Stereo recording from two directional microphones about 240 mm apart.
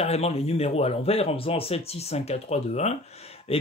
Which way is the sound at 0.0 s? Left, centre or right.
Left.